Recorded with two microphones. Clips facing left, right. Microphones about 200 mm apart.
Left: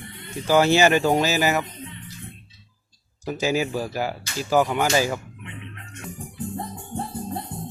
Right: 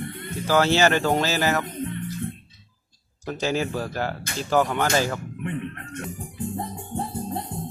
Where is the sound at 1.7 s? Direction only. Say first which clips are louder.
Right 9 dB; 55° right (ahead or behind).